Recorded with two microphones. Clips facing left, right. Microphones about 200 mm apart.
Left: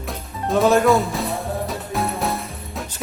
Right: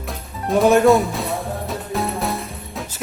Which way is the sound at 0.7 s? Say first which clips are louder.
Right 3 dB; 20° right (ahead or behind).